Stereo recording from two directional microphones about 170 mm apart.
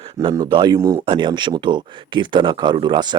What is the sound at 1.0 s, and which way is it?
Speech, 30° right (ahead or behind).